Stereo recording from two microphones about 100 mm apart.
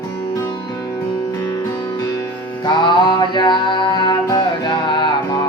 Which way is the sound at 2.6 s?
50° left (ahead or behind).